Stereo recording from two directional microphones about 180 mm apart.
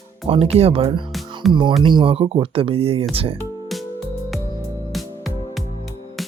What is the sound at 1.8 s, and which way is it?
Speech, 30° right (ahead or behind).